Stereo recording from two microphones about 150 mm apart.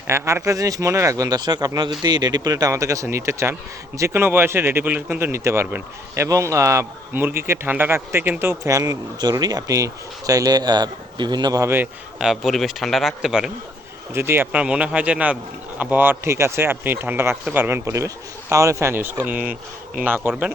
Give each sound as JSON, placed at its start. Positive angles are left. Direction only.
{"t": 0.1, "sound": "speech", "side_deg": -20}
{"t": 12.2, "sound": "a man's voice", "side_deg": 0}
{"t": 14.1, "sound": "speech", "side_deg": -15}